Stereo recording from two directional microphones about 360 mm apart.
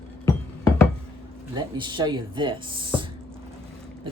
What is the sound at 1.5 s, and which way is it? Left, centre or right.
Speech, centre.